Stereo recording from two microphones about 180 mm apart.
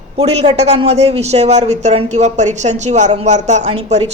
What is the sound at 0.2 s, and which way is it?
Speech, 35° right (ahead or behind).